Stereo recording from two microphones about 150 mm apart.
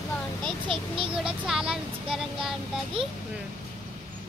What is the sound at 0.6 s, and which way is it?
Speech, 35° right (ahead or behind).